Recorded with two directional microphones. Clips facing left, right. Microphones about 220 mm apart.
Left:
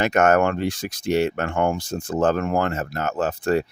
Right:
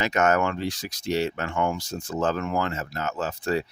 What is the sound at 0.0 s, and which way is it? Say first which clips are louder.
Speech: left 5 dB; 55° left (ahead or behind).